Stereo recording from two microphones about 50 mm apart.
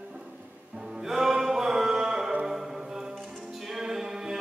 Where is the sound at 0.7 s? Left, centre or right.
Centre.